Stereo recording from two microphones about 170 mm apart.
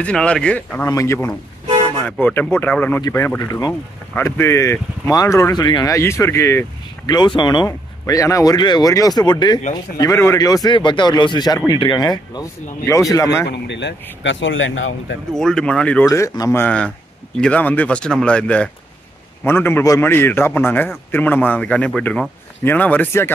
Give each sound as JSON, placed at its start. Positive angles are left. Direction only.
{"t": 0.0, "sound": "speech", "side_deg": 5}
{"t": 13.5, "sound": "speech", "side_deg": 90}
{"t": 15.3, "sound": "speech", "side_deg": 5}
{"t": 16.1, "sound": "speech", "side_deg": 20}